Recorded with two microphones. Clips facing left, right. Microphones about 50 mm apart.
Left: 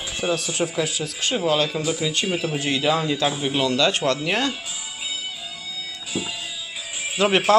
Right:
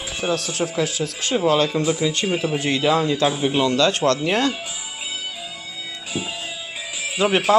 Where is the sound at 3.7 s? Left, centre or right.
Centre.